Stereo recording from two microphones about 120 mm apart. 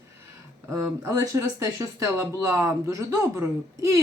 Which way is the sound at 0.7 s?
25° right (ahead or behind).